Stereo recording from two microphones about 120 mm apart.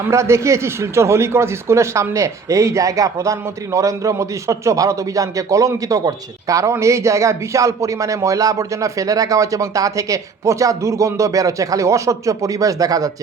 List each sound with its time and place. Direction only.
0.1 s speech: 25° right (ahead or behind)